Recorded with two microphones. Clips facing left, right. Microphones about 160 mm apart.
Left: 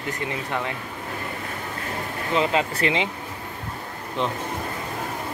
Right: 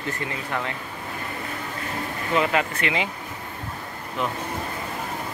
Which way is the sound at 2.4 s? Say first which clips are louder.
Left 1 dB; 25° left (ahead or behind).